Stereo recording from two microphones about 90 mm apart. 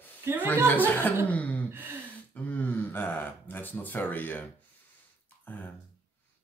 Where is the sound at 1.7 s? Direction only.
25° right (ahead or behind).